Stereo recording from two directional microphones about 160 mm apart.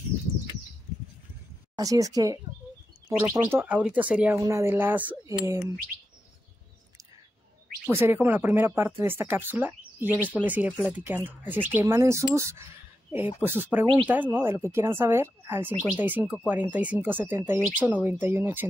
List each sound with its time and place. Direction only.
1.8 s speech: 20° right (ahead or behind)
4.4 s speech: 20° right (ahead or behind)
7.9 s speech: 15° right (ahead or behind)